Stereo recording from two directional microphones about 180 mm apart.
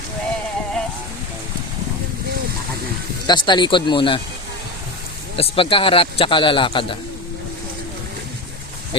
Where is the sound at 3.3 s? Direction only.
25° left (ahead or behind).